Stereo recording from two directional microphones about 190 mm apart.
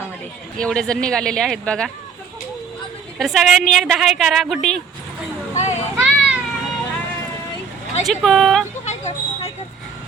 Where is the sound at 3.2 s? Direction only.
Centre (ahead or behind).